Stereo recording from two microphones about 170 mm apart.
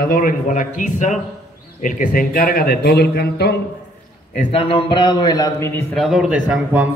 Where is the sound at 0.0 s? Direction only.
55° left (ahead or behind); by 3.6 s 70° left (ahead or behind).